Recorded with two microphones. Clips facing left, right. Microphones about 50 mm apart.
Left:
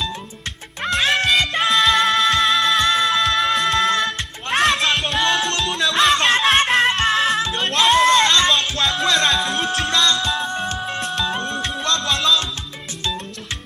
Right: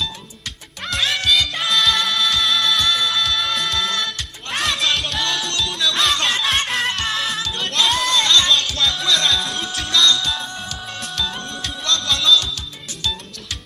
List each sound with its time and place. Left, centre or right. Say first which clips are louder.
1.0 s music: left 1 dB; left
5.4 s music: left 2 dB; left
7.3 s music: left 3 dB; left
9.6 s music: left 6 dB; left
10.1 s music: left 1 dB; left